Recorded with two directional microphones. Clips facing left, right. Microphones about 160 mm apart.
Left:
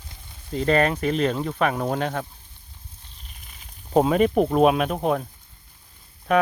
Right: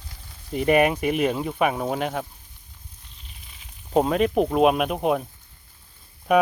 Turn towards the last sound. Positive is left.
turn(degrees=-15)  # may be behind; listen again after turning